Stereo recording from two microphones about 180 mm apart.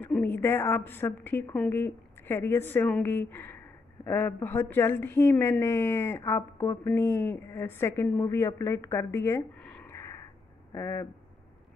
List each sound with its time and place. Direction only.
0.0 s a woman's voice: 10° left (ahead or behind)